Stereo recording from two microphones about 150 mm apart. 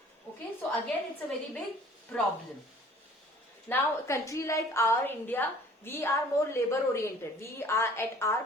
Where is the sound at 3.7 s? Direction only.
20° left (ahead or behind).